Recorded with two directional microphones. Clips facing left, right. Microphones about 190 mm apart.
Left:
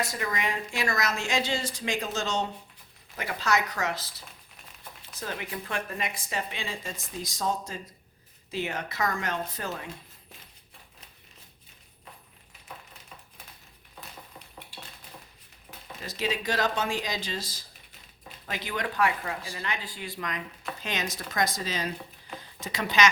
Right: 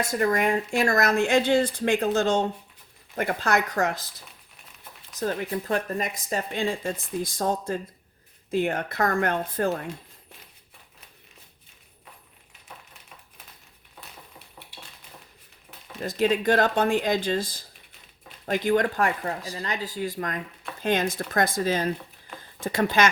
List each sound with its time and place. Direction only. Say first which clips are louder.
0.1 s speech: right 9 dB; 50° right (ahead or behind)
5.2 s speech: right 8 dB; 40° right (ahead or behind)
16.0 s speech: right 8 dB; 50° right (ahead or behind)